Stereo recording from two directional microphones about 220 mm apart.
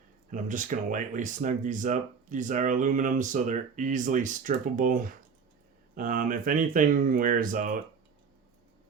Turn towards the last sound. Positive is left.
turn(degrees=-35)  # may be behind; listen again after turning